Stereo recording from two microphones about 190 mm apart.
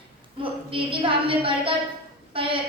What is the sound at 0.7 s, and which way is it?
A woman's voice, 30° right (ahead or behind).